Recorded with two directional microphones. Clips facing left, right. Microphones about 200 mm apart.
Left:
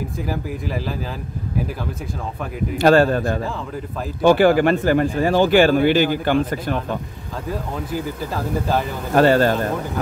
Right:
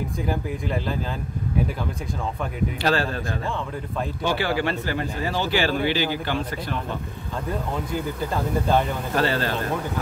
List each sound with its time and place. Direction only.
0.3 s speech: 5° left (ahead or behind)
2.8 s speech: 50° left (ahead or behind)
9.1 s speech: 50° left (ahead or behind)